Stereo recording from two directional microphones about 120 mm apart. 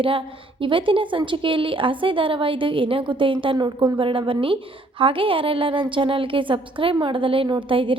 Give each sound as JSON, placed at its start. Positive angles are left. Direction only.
{"t": 0.0, "sound": "a woman's voice", "side_deg": -45}
{"t": 4.0, "sound": "a woman's voice", "side_deg": -45}